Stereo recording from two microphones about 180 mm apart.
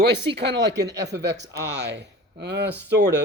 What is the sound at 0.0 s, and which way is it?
Speech, 75° right (ahead or behind).